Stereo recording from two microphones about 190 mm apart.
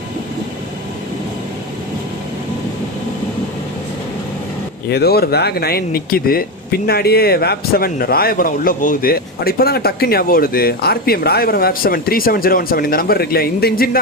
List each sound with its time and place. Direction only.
4.9 s speech: 55° left (ahead or behind)